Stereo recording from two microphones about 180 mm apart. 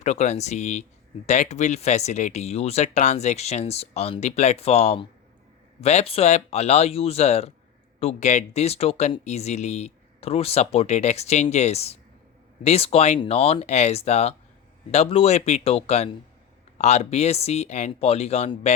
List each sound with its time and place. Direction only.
0.0 s speech: 40° left (ahead or behind)